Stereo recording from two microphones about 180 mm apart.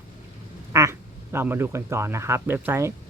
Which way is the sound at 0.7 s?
15° right (ahead or behind).